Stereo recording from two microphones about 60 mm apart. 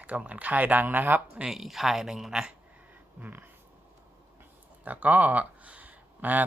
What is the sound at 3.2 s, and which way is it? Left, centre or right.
Speech, right.